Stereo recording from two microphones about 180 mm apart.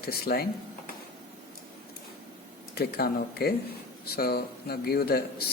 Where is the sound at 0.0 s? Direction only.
60° left (ahead or behind).